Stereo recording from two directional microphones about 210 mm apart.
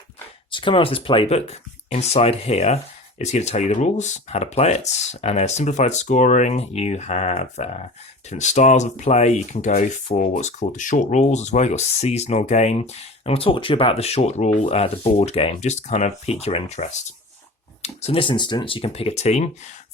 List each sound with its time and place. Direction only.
0.5 s speech: 25° left (ahead or behind)